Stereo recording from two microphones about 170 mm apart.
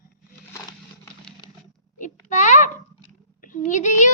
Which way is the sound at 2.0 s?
45° left (ahead or behind).